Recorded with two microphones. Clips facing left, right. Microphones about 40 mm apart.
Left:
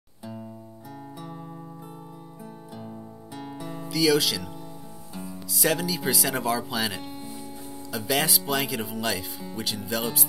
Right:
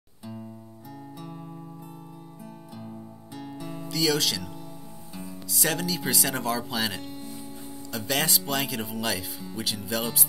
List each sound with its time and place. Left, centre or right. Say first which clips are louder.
3.3 s music: left 1 dB; centre
5.1 s speech: left 1 dB; centre